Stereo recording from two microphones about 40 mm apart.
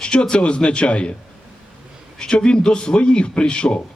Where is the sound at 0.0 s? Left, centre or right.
Left.